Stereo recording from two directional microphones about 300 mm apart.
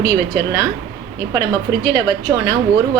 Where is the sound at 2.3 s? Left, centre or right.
Centre.